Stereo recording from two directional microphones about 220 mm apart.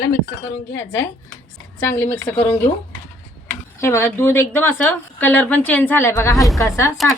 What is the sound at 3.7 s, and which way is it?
A woman's voice, 10° left (ahead or behind).